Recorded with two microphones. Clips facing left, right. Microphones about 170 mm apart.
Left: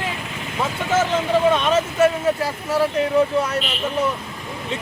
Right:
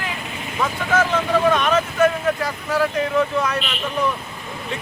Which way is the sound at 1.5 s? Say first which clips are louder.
Even; 30° left (ahead or behind).